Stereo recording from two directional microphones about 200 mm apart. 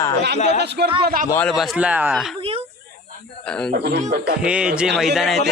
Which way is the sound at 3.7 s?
50° right (ahead or behind).